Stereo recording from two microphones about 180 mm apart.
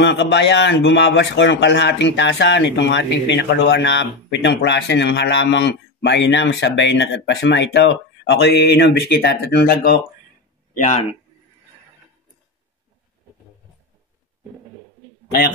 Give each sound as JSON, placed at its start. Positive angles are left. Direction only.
{"t": 0.0, "sound": "a man's voice", "side_deg": 75}
{"t": 10.7, "sound": "a man's voice", "side_deg": 40}